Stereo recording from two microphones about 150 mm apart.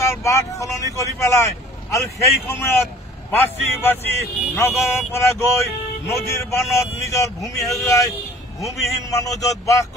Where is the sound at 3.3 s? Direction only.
15° left (ahead or behind).